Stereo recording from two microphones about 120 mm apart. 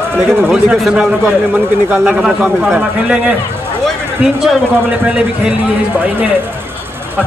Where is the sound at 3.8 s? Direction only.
5° right (ahead or behind).